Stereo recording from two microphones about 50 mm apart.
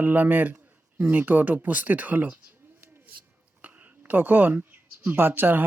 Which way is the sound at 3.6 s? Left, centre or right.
Right.